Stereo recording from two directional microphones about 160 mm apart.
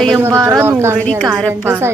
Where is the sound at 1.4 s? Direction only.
15° right (ahead or behind).